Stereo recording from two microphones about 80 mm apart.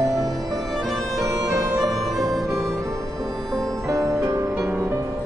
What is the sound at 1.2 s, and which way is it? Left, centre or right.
Bagpipes, right.